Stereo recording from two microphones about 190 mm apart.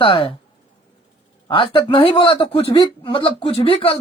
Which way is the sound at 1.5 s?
25° left (ahead or behind).